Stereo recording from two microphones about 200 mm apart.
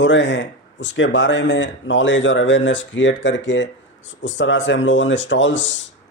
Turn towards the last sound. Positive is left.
turn(degrees=65)  # may be behind; listen again after turning